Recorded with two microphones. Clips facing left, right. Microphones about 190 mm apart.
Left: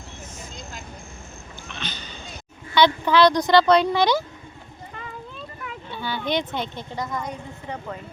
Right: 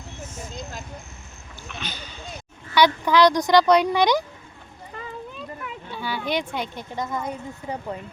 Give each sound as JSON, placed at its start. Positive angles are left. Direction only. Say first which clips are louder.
{"t": 1.6, "sound": "a sound", "louder": "right 1 dB", "side_deg": -5}
{"t": 2.7, "sound": "speech", "louder": "even", "side_deg": -10}
{"t": 5.6, "sound": "speech", "louder": "left 1 dB", "side_deg": -10}
{"t": 6.9, "sound": "a woman's voice", "louder": "right 1 dB", "side_deg": -20}
{"t": 7.2, "sound": "speech", "louder": "right 2 dB", "side_deg": -5}